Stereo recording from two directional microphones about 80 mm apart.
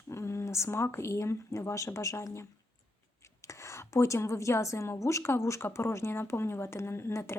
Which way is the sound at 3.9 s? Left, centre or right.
Left.